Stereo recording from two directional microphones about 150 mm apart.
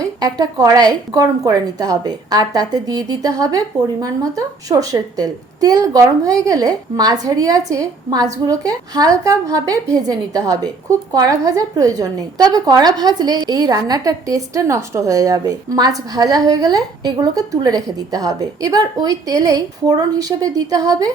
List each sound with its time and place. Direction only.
0.0 s a woman's voice: 25° right (ahead or behind)